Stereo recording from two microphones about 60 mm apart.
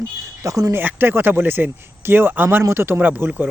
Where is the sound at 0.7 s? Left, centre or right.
Right.